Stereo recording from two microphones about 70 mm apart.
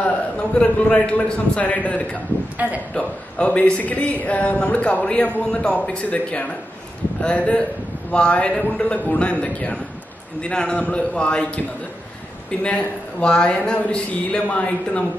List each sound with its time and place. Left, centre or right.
0.6 s a man's voice: centre
2.5 s speech: right
2.9 s a man's voice: centre